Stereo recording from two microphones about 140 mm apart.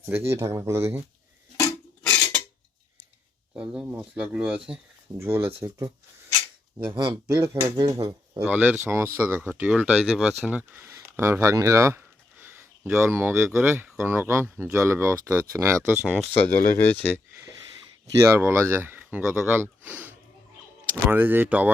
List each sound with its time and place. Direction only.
0.0 s speech: 20° right (ahead or behind)
1.5 s a sound: 20° left (ahead or behind)
3.5 s speech: 5° right (ahead or behind)
5.1 s speech: 15° right (ahead or behind)
6.9 s speech: 35° right (ahead or behind)
7.4 s speech: 20° right (ahead or behind)
8.5 s speech: 10° right (ahead or behind)
16.0 s speech: 10° left (ahead or behind)
18.2 s speech: 15° right (ahead or behind)